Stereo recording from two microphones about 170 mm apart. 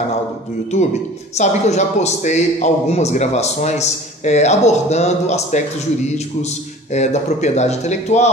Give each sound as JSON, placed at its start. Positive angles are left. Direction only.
{"t": 1.4, "sound": "a man's voice", "side_deg": 40}